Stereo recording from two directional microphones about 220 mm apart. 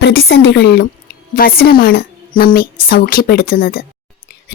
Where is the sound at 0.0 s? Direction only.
50° left (ahead or behind).